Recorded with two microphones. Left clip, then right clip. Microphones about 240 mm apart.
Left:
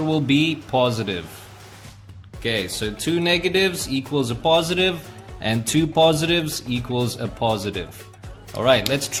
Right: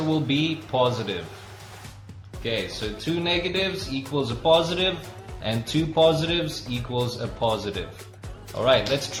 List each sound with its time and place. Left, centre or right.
0.1 s speech: left
2.4 s speech: left